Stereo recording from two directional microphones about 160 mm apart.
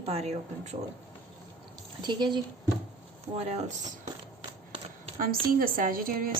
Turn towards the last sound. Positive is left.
turn(degrees=-65)  # may be behind; listen again after turning